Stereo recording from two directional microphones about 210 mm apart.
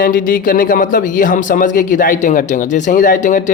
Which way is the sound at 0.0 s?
40° left (ahead or behind).